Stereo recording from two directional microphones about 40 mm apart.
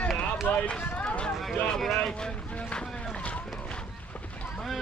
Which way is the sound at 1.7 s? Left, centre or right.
Centre.